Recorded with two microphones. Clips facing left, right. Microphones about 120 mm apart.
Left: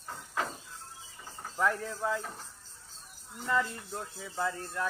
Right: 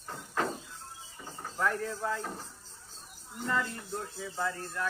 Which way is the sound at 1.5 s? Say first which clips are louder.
Left 1 dB; 5° left (ahead or behind).